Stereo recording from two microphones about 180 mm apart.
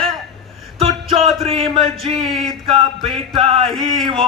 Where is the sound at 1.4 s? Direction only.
30° right (ahead or behind).